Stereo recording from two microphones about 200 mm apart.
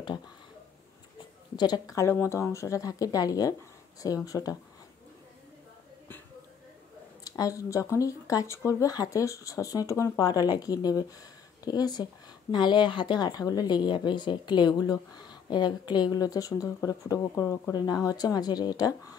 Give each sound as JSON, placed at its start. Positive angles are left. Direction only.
{"t": 1.6, "sound": "speech", "side_deg": 20}
{"t": 7.2, "sound": "speech", "side_deg": 15}